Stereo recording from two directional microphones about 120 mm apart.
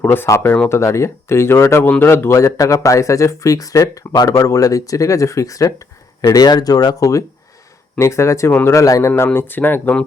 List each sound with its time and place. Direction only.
0.0 s speech: 15° left (ahead or behind)